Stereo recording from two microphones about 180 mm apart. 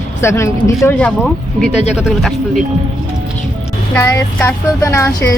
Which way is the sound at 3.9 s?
15° left (ahead or behind).